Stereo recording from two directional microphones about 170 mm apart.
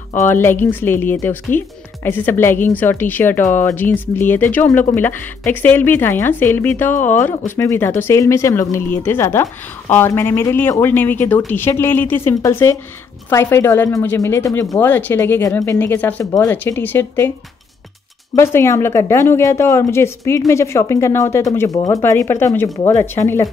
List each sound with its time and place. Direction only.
0.3 s speech: 15° left (ahead or behind)
18.3 s speech: 15° left (ahead or behind)